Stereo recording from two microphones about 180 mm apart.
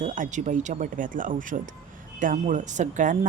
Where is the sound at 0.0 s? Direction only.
45° right (ahead or behind).